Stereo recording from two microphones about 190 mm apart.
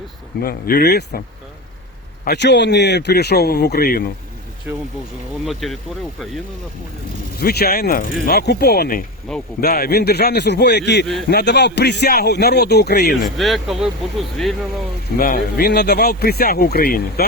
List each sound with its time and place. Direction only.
0.4 s speech: 50° left (ahead or behind)
2.2 s speech: 65° left (ahead or behind)
4.7 s speech: 5° right (ahead or behind)
7.3 s speech: 55° left (ahead or behind)
13.2 s speech: centre (ahead or behind)
15.2 s speech: 50° left (ahead or behind)